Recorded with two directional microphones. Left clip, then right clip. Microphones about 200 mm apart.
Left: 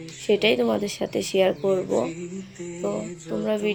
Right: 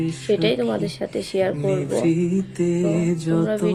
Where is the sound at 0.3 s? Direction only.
10° right (ahead or behind).